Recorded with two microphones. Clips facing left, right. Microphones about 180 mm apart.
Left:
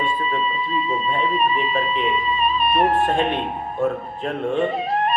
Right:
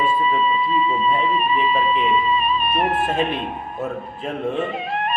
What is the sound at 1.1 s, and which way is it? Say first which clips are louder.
Speech: right 1 dB; 35° left (ahead or behind).